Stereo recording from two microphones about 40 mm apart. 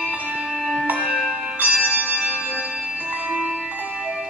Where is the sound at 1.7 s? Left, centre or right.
Right.